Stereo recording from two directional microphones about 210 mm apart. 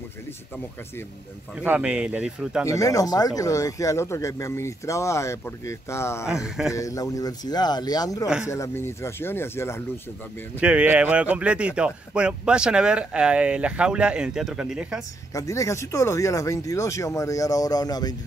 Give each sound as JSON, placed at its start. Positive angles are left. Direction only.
{"t": 1.6, "sound": "speech", "side_deg": -5}
{"t": 2.6, "sound": "speech", "side_deg": 15}
{"t": 6.2, "sound": "speech", "side_deg": -5}
{"t": 6.7, "sound": "speech", "side_deg": 15}
{"t": 10.6, "sound": "speech", "side_deg": -5}
{"t": 15.3, "sound": "speech", "side_deg": 15}